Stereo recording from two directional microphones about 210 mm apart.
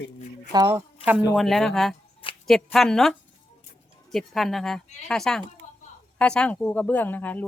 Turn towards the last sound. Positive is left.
turn(degrees=10)  # may be behind; listen again after turning